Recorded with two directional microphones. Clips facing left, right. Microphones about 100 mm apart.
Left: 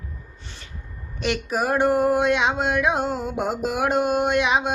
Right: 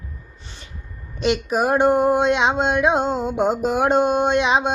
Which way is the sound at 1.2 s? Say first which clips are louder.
Right 4 dB; 20° right (ahead or behind).